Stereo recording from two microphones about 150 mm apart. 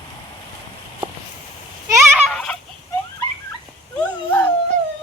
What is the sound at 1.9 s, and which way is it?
Turkey, 15° right (ahead or behind).